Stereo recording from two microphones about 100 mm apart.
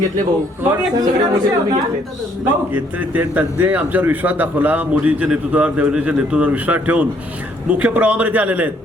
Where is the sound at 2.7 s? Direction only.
15° right (ahead or behind).